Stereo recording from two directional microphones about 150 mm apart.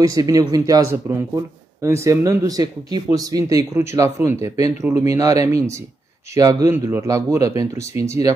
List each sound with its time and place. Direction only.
0.0 s a man's voice: 25° right (ahead or behind)